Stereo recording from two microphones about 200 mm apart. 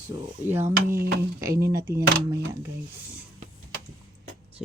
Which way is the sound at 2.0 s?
55° right (ahead or behind).